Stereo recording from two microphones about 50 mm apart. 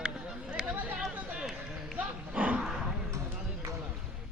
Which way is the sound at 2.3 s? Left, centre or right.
Right.